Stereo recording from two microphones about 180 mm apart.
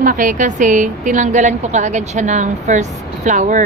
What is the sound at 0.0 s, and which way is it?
A woman's voice, 50° right (ahead or behind).